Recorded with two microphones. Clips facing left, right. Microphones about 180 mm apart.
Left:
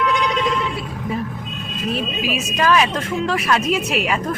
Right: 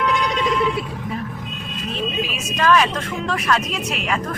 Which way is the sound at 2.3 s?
10° left (ahead or behind).